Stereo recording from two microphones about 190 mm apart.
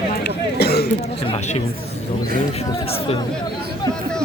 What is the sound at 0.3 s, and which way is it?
Throat clearing, 60° left (ahead or behind).